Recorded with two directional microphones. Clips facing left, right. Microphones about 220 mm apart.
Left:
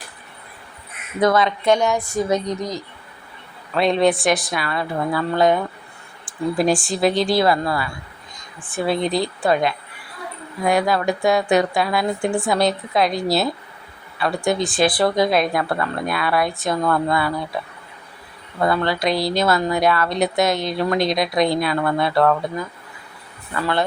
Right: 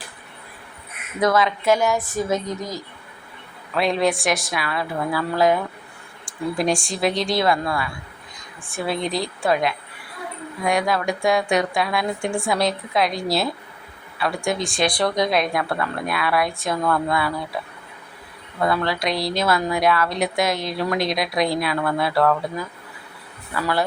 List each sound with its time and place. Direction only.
1.2 s speech: centre (ahead or behind)
18.6 s speech: centre (ahead or behind)
23.6 s speech: 5° right (ahead or behind)